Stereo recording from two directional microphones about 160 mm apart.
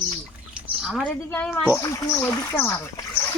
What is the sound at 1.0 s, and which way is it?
A woman's voice, 10° left (ahead or behind).